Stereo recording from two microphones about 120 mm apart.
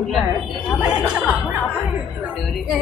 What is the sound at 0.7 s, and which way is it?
Music, 10° right (ahead or behind).